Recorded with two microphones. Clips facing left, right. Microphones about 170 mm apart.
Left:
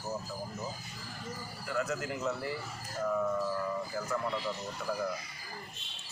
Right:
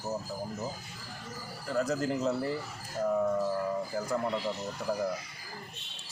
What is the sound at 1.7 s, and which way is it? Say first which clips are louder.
Speech: right 5 dB; 35° right (ahead or behind).